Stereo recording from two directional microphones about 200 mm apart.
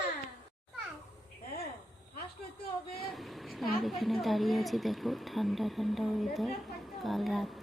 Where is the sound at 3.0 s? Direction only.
Centre (ahead or behind).